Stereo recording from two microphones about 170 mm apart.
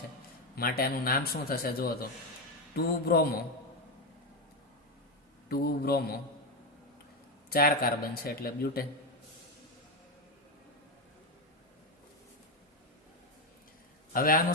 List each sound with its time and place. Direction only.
0.5 s a man's voice: 60° left (ahead or behind)
5.5 s a man's voice: 65° left (ahead or behind)
7.5 s a man's voice: 65° left (ahead or behind)
14.1 s a man's voice: 60° left (ahead or behind)